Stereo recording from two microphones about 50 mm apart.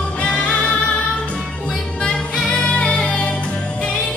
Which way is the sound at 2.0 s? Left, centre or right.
Centre.